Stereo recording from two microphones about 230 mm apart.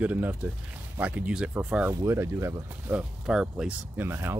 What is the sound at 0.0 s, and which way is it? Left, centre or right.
Speech, centre.